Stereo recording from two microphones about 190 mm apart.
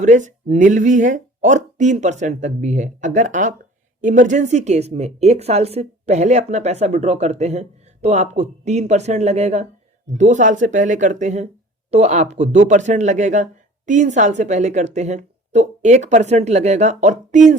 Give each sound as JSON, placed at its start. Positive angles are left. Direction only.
{"t": 0.0, "sound": "speech", "side_deg": -40}